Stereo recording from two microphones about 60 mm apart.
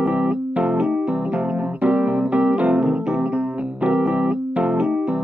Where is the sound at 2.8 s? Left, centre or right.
Centre.